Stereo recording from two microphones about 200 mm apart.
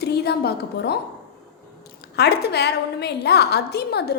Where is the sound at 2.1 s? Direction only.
55° left (ahead or behind).